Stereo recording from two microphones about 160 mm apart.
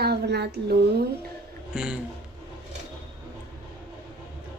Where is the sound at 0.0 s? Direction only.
90° right.